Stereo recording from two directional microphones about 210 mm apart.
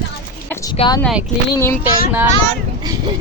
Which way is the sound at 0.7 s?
25° left (ahead or behind).